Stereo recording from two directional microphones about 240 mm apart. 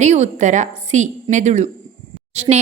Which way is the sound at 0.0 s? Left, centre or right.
Right.